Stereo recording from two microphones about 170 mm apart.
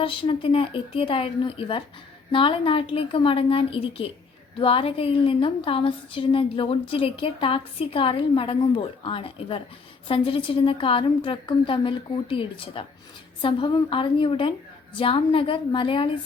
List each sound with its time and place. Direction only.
0.0 s a woman's voice: 30° left (ahead or behind)